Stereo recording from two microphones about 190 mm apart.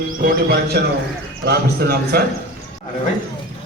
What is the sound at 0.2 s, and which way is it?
Speech, 50° right (ahead or behind).